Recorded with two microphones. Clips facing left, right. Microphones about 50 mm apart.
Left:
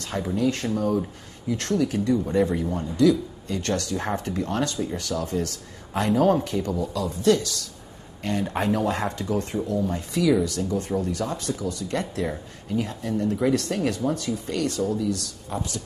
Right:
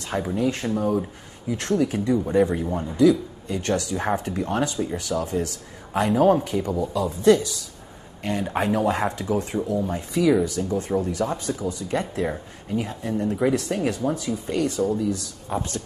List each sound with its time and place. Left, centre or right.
0.1 s speech: centre